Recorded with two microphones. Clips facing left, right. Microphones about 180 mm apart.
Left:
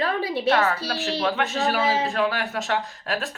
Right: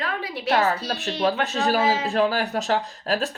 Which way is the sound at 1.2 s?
35° right (ahead or behind).